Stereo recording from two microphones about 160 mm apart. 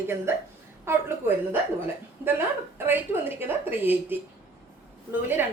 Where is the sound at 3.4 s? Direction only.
10° right (ahead or behind).